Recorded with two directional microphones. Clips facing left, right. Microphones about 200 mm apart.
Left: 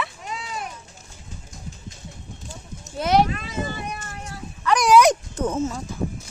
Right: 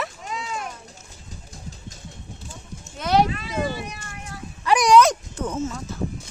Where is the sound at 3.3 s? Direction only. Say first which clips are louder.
Right 2 dB; 50° left (ahead or behind).